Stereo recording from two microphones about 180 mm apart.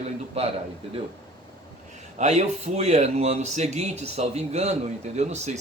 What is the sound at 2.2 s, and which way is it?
A man's voice, 40° right (ahead or behind).